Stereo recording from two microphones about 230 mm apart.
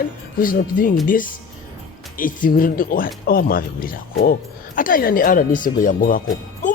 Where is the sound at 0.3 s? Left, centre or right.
Left.